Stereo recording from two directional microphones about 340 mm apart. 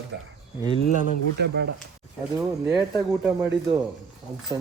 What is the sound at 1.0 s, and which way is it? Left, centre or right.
Speech, right.